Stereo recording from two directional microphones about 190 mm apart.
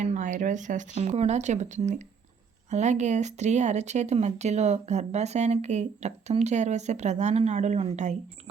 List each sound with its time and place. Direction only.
0.0 s speech: 40° right (ahead or behind)